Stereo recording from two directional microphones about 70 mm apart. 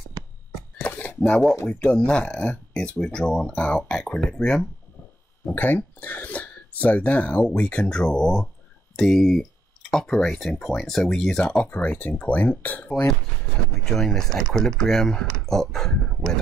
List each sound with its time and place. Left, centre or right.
0.7 s a sound: left
1.7 s speech: centre
5.4 s speech: left; by 11.6 s centre
11.6 s speech: left
12.9 s speech: centre